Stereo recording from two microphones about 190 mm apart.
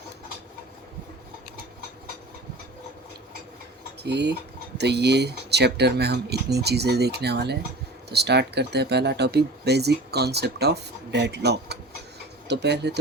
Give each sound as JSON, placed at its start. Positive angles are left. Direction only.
{"t": 4.0, "sound": "speech", "side_deg": -60}